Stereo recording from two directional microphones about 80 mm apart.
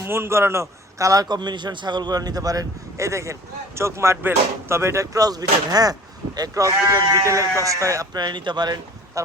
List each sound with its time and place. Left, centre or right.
0.0 s speech: right
8.1 s speech: right
9.2 s a sound: right